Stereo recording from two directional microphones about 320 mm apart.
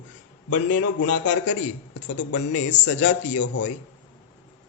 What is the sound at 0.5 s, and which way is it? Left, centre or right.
Speech, left.